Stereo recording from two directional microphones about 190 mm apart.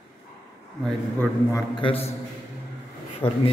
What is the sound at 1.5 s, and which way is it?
Speech, 20° left (ahead or behind).